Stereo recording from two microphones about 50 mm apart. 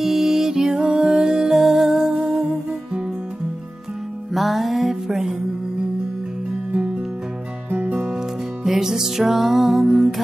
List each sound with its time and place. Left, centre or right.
0.0 s music: centre
0.7 s music: right
4.3 s music: centre
8.6 s music: centre